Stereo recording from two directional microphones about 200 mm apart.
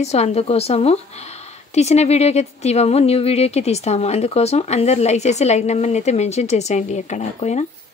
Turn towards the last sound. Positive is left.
turn(degrees=35)  # may be behind; listen again after turning